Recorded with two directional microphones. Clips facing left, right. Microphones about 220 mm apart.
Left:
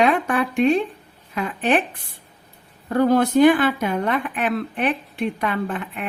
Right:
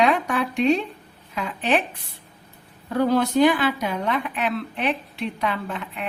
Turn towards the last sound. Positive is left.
turn(degrees=50)  # may be behind; listen again after turning